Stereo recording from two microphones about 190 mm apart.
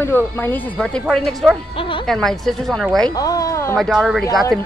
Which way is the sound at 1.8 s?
25° left (ahead or behind).